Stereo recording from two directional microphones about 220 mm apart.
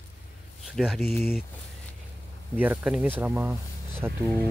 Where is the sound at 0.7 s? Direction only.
Centre (ahead or behind).